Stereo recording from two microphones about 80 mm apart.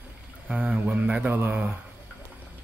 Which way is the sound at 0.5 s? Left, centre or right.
Centre.